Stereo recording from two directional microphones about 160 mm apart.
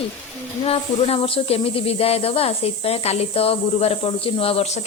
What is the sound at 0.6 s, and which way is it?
Speech, 35° left (ahead or behind).